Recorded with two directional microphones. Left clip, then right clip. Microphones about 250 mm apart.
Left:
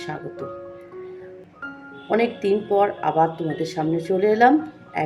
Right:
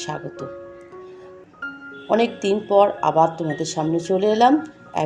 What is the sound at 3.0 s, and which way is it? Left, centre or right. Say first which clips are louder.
Speech: right 2 dB; centre.